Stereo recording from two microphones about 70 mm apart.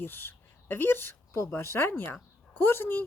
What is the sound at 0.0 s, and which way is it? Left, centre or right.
A woman's voice, left.